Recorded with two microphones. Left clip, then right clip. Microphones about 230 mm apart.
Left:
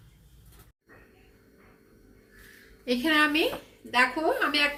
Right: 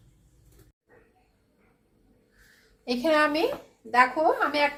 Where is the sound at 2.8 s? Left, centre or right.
Right.